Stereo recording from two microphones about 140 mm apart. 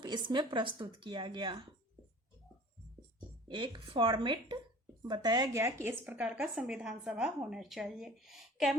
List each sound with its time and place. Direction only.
0.0 s a woman's voice: 35° right (ahead or behind)
3.5 s a woman's voice: 35° right (ahead or behind); by 8.8 s centre (ahead or behind)